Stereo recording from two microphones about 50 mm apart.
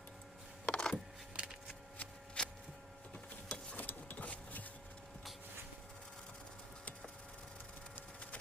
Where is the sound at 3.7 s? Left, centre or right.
Left.